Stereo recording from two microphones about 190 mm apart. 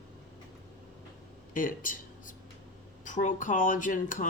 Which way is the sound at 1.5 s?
45° left (ahead or behind).